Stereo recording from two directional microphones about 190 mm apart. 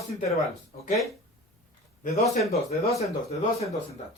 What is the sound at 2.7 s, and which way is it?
Speech, 35° left (ahead or behind).